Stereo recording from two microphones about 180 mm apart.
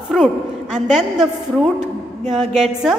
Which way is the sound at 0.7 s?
5° right (ahead or behind).